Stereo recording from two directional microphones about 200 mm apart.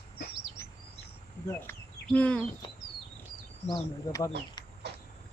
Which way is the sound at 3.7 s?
20° left (ahead or behind).